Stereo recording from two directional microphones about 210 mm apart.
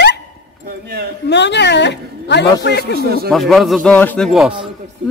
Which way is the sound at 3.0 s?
45° right (ahead or behind).